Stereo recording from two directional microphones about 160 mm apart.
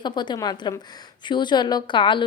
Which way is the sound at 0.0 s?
25° left (ahead or behind).